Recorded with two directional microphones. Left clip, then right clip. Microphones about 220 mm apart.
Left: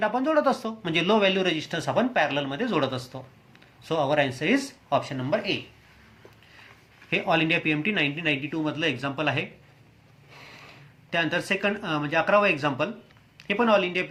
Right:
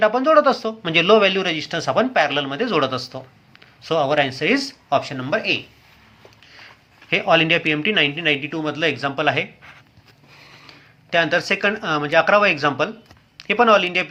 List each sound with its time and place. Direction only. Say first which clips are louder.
0.0 s speech: right 8 dB; 10° right (ahead or behind)
7.1 s speech: right 7 dB; 10° right (ahead or behind)
11.1 s speech: right 7 dB; 10° right (ahead or behind)